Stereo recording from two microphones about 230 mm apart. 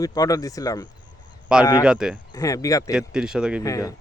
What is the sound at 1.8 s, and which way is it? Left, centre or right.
Speech, centre.